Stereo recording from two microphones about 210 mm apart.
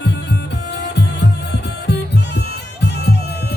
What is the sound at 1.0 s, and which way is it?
Music, 55° left (ahead or behind).